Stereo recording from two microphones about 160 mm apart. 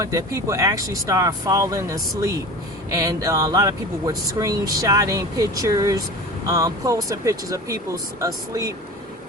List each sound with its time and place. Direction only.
0.0 s speech: 20° right (ahead or behind)